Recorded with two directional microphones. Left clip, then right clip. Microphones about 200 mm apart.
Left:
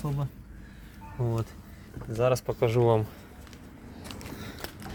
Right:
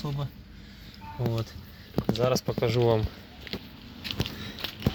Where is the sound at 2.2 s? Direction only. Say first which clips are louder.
Left 2 dB; 10° left (ahead or behind).